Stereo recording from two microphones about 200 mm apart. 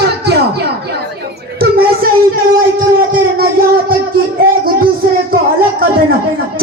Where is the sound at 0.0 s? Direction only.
55° right (ahead or behind).